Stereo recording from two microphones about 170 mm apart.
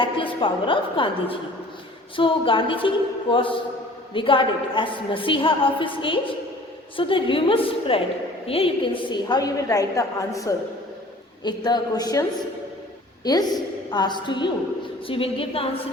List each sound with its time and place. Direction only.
0.0 s a woman's voice: 30° left (ahead or behind)